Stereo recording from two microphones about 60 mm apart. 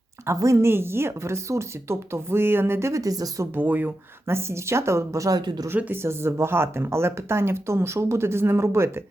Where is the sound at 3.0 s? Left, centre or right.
Right.